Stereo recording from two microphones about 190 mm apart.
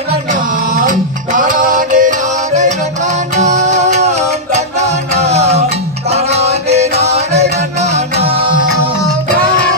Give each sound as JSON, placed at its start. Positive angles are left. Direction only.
{"t": 0.3, "sound": "music", "side_deg": -45}